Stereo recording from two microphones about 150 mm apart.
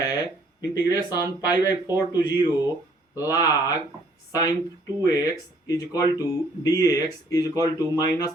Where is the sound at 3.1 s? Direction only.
25° left (ahead or behind).